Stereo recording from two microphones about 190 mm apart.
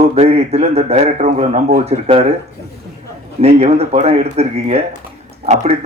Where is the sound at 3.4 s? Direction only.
35° right (ahead or behind).